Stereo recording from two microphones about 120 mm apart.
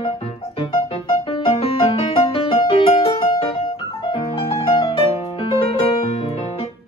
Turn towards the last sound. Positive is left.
turn(degrees=50)  # may be behind; listen again after turning